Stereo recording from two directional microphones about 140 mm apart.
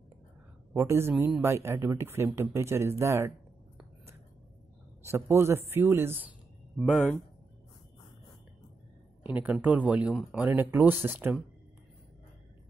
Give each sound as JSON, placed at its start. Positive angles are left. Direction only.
{"t": 0.7, "sound": "speech", "side_deg": -20}
{"t": 5.0, "sound": "speech", "side_deg": -20}
{"t": 6.8, "sound": "speech", "side_deg": 0}
{"t": 9.3, "sound": "speech", "side_deg": -10}